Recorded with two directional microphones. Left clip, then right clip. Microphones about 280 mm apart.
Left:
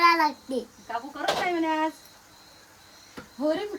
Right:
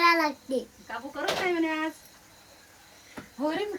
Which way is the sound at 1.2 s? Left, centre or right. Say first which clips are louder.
Left 2 dB; left.